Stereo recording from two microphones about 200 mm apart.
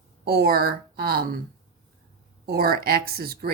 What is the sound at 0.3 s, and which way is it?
Speech, 50° right (ahead or behind).